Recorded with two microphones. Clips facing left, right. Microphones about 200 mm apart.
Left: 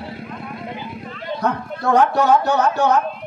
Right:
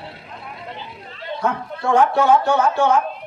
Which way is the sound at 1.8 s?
40° left (ahead or behind).